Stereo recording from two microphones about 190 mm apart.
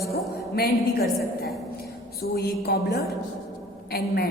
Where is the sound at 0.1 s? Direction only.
55° left (ahead or behind).